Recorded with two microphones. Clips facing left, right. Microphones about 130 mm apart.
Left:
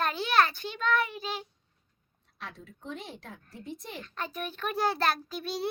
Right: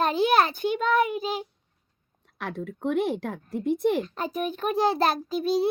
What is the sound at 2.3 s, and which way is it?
A child's voice, 60° right (ahead or behind).